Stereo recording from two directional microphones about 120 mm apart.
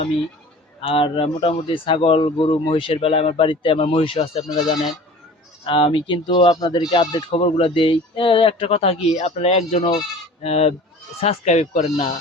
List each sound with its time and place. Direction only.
0.8 s speech: 50° left (ahead or behind)
5.6 s speech: 45° left (ahead or behind); by 12.0 s 75° left (ahead or behind)